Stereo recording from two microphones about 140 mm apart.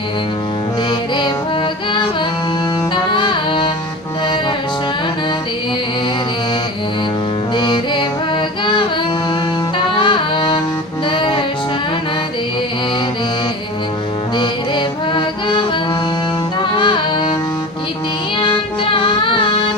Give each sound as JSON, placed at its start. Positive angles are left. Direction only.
{"t": 0.9, "sound": "music", "side_deg": 35}
{"t": 2.9, "sound": "saxophone", "side_deg": 35}
{"t": 7.5, "sound": "music", "side_deg": 35}
{"t": 9.7, "sound": "saxophone", "side_deg": 35}
{"t": 11.1, "sound": "music", "side_deg": 35}
{"t": 14.3, "sound": "music", "side_deg": 35}
{"t": 18.9, "sound": "music", "side_deg": 40}